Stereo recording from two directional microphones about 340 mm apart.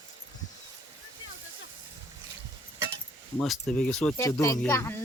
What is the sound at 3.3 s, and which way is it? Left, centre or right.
Speech, centre.